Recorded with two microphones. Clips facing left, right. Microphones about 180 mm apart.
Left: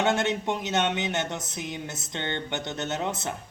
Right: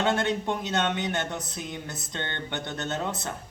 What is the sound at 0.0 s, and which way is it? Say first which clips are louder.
Speech: left 1 dB; 20° left (ahead or behind).